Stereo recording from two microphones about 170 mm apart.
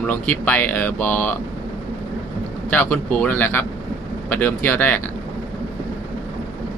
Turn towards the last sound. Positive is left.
turn(degrees=10)  # may be behind; listen again after turning